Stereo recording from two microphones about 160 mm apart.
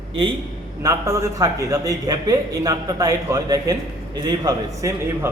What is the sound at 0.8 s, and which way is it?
A man's voice, 20° right (ahead or behind).